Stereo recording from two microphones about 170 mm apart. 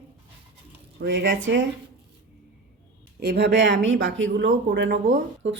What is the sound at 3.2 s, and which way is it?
Speech, 80° right.